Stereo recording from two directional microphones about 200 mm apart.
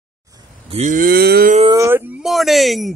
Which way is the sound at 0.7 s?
35° right (ahead or behind).